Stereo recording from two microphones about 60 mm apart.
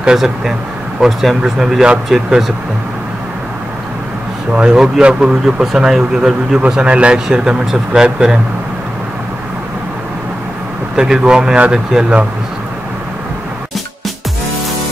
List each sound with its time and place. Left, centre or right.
0.0 s speech: centre
5.0 s speech: centre
11.0 s speech: centre